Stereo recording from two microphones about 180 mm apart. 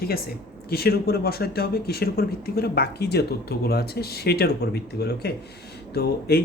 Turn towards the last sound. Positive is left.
turn(degrees=60)  # may be behind; listen again after turning